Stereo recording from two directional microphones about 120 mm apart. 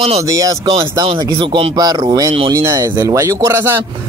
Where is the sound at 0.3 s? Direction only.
30° right (ahead or behind).